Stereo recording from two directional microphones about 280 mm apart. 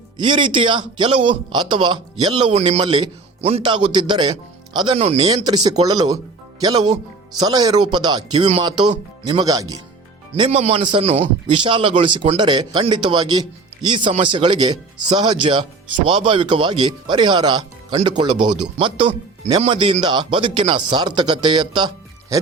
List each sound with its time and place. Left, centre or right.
0.2 s a man's voice: centre